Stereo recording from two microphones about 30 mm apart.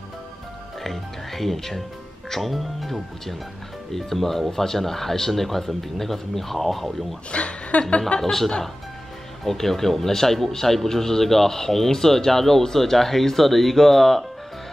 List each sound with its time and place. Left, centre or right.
0.8 s music: centre
2.2 s speech: centre
2.5 s speech: centre
7.2 s a woman's voice: left
8.2 s speech: centre